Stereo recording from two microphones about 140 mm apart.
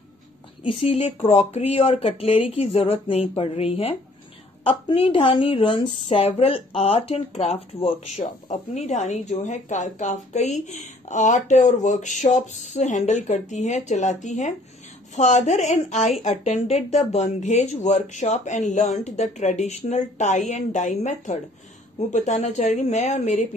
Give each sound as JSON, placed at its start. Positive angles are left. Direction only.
{"t": 0.7, "sound": "a woman's voice", "side_deg": 45}